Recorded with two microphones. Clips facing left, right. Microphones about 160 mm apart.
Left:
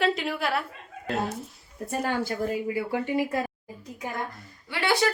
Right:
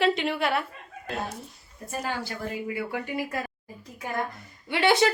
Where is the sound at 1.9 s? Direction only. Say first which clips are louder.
Left 4 dB; 55° left (ahead or behind).